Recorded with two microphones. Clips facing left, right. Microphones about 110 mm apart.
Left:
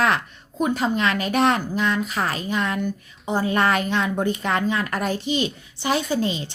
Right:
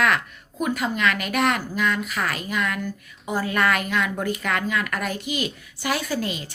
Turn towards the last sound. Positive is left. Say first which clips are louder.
# left 4 dB
turn(degrees=25)  # may be behind; listen again after turning